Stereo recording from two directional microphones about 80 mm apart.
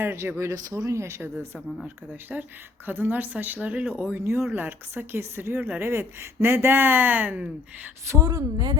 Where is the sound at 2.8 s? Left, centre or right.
Right.